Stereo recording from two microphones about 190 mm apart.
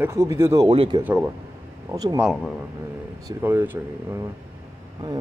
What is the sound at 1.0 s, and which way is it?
Speech, 10° right (ahead or behind).